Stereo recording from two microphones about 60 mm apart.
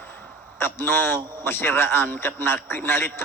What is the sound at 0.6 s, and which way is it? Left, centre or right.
A man's voice, left.